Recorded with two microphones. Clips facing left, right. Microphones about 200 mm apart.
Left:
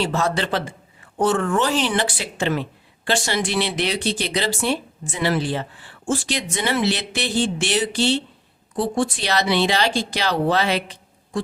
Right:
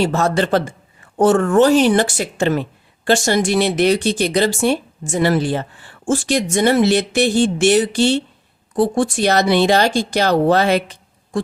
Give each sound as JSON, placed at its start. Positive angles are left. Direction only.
{"t": 0.0, "sound": "speech", "side_deg": -45}